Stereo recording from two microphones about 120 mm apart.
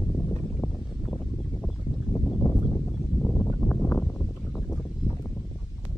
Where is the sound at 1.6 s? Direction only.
15° left (ahead or behind).